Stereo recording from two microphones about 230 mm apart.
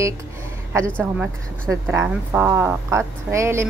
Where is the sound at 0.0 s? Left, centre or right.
Centre.